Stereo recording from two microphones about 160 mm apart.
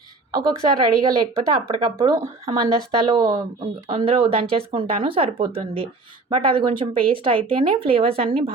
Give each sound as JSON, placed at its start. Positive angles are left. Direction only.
{"t": 0.3, "sound": "a woman's voice", "side_deg": -25}
{"t": 3.2, "sound": "a woman's voice", "side_deg": -25}